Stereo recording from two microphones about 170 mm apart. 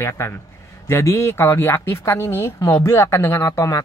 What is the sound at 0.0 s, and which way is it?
Speech, 15° left (ahead or behind).